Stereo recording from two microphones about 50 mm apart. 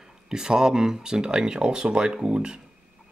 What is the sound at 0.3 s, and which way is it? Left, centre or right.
Speech, centre.